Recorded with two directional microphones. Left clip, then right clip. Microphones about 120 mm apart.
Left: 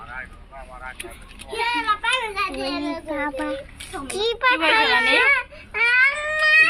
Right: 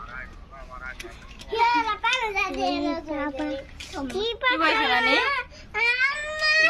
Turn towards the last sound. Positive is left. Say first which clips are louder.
# left 5 dB
turn(degrees=-15)  # may be behind; listen again after turning